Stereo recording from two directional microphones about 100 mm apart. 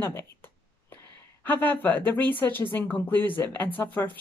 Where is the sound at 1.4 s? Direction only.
20° left (ahead or behind).